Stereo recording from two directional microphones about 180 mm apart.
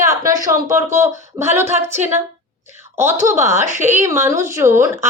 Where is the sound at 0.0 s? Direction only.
15° right (ahead or behind).